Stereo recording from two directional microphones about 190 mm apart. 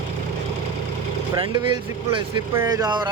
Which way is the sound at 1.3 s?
25° right (ahead or behind).